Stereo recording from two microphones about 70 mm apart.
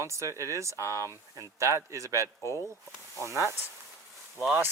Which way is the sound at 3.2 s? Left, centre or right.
Right.